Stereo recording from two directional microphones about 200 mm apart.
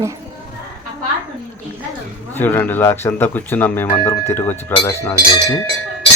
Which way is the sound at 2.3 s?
10° left (ahead or behind).